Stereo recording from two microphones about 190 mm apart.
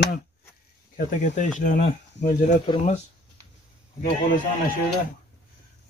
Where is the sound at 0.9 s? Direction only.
40° left (ahead or behind).